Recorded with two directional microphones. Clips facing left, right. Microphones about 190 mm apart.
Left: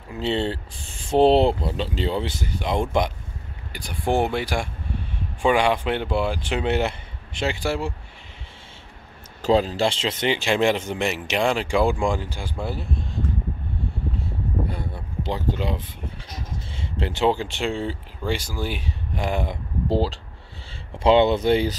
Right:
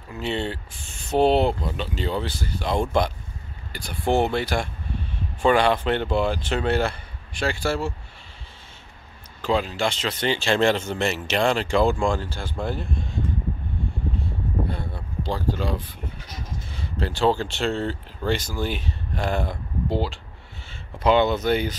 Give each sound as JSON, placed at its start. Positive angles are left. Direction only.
{"t": 0.2, "sound": "speech", "side_deg": 30}
{"t": 9.4, "sound": "speech", "side_deg": 35}
{"t": 15.2, "sound": "speech", "side_deg": 20}
{"t": 19.9, "sound": "speech", "side_deg": 35}